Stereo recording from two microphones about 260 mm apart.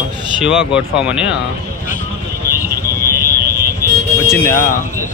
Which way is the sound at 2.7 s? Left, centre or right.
Right.